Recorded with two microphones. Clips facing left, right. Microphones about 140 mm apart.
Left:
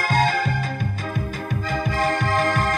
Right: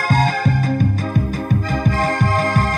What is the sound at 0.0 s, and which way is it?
Music, 45° right (ahead or behind).